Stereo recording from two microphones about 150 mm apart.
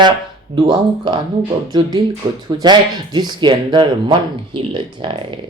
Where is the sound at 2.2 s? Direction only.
30° right (ahead or behind).